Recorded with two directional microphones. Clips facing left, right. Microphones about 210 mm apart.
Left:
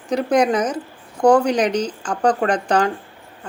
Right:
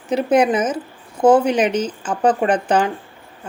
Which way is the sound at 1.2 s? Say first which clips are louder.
Right 1 dB; 20° right (ahead or behind).